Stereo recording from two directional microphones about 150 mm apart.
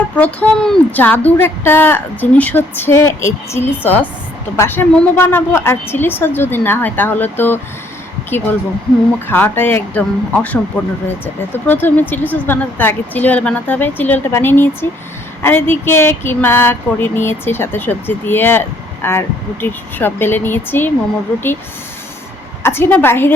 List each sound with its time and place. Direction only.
0.2 s a woman's voice: 10° left (ahead or behind)
22.6 s a woman's voice: 15° left (ahead or behind)